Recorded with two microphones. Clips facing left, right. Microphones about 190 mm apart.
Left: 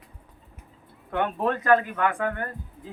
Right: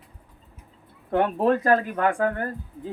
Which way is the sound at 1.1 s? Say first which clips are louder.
Right 5 dB; 35° right (ahead or behind).